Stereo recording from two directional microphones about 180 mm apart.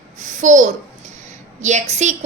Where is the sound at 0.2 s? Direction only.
45° right (ahead or behind).